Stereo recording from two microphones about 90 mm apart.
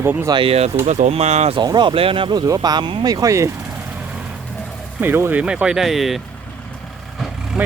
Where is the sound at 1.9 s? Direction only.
90° right.